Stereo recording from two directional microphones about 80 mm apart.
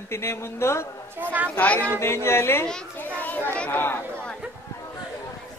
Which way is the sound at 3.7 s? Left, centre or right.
Left.